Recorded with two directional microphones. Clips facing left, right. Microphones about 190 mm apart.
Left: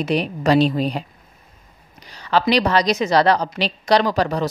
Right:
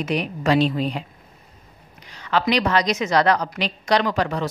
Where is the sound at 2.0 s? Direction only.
35° left (ahead or behind).